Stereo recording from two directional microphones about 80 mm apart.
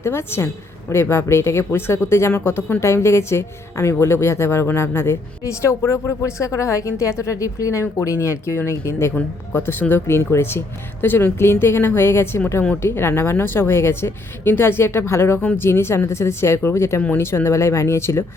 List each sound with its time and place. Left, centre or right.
0.0 s speech: left
9.1 s speech: centre; by 18.3 s left